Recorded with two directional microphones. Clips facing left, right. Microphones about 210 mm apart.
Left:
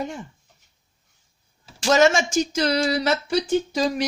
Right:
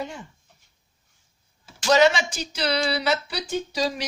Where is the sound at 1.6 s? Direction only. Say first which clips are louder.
Left 1 dB; 45° left (ahead or behind).